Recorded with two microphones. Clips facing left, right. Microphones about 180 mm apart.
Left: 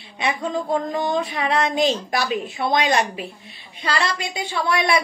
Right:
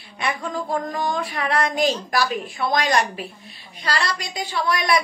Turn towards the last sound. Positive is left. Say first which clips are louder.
# left 1 dB
turn(degrees=25)  # may be behind; listen again after turning